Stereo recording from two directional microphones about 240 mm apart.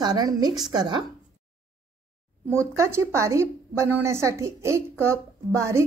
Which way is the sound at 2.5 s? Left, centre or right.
Centre.